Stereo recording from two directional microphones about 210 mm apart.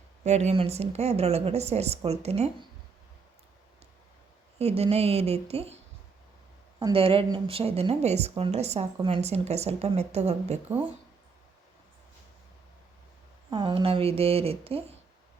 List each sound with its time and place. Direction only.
0.3 s speech: 30° right (ahead or behind)
4.5 s speech: 30° right (ahead or behind)
13.5 s speech: 25° right (ahead or behind)